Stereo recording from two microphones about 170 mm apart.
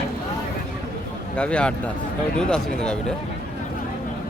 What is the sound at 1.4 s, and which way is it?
Speech, 5° left (ahead or behind).